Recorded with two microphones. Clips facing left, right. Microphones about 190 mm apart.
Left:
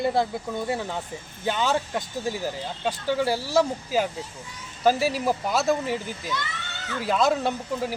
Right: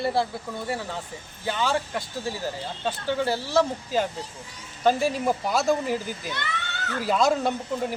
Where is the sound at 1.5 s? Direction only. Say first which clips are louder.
Left 1 dB; 20° left (ahead or behind); by 6.0 s centre (ahead or behind).